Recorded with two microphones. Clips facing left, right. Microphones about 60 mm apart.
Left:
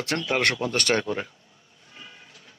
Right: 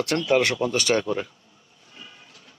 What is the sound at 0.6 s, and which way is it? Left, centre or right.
Speech, left.